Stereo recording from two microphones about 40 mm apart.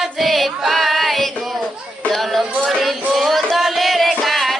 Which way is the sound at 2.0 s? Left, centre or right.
Centre.